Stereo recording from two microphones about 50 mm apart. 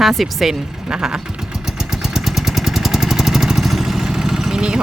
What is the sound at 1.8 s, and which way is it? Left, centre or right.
Vehicle, centre.